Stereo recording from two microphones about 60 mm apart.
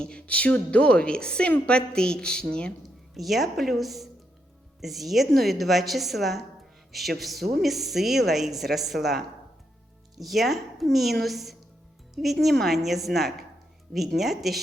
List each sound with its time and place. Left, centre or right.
0.0 s a woman's voice: centre
3.2 s speech: centre